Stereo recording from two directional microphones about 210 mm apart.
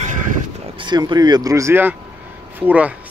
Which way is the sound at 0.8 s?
20° right (ahead or behind).